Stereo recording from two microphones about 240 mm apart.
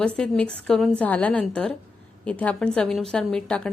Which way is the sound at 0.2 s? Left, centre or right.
Centre.